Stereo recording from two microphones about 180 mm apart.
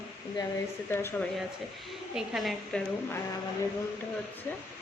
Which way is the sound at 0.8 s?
10° left (ahead or behind).